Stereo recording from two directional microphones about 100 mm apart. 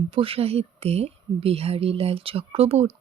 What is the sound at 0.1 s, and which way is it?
Speech, 65° right (ahead or behind).